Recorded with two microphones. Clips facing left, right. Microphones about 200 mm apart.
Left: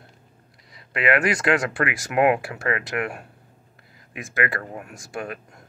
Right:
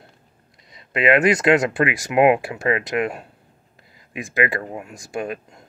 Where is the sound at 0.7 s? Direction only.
20° right (ahead or behind).